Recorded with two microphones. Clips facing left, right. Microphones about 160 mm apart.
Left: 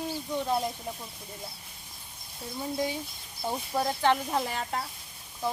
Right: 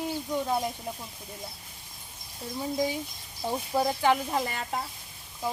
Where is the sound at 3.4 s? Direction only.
10° right (ahead or behind).